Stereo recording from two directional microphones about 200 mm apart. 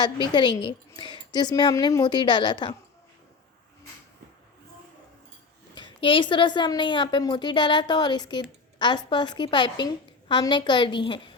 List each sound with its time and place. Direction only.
0.3 s a woman's voice: 25° left (ahead or behind)
5.7 s a woman's voice: 25° left (ahead or behind)